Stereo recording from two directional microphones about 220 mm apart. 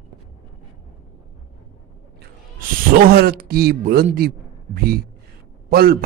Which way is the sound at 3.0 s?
45° right (ahead or behind).